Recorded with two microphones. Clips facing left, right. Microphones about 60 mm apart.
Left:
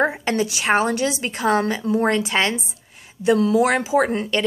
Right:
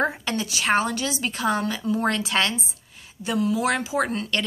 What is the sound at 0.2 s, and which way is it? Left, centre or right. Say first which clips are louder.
Speech: left 5 dB; left.